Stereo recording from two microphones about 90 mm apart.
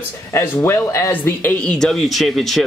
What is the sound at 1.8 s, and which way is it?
Speech, centre (ahead or behind).